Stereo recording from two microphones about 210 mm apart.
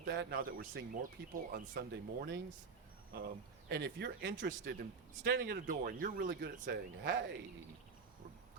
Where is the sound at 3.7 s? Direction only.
50° right (ahead or behind).